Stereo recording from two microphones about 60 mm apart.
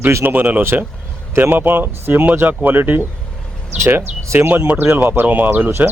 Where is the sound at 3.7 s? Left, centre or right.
Right.